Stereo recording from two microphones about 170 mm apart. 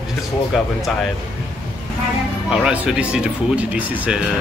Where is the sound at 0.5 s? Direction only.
Centre (ahead or behind).